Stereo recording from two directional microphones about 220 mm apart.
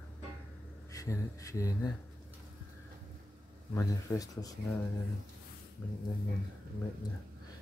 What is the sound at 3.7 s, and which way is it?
Speech, 15° left (ahead or behind).